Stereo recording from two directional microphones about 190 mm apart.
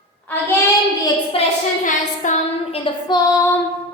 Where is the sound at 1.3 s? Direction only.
30° left (ahead or behind).